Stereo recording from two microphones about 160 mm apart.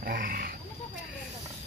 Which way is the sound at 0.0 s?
65° right (ahead or behind).